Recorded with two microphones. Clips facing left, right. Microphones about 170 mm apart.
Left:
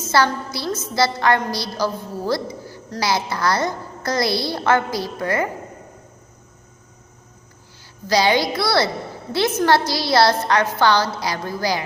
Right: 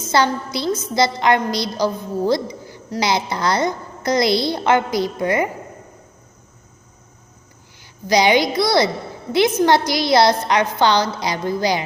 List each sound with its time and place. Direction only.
0.0 s a woman's voice: 20° right (ahead or behind)
8.0 s a woman's voice: 15° right (ahead or behind)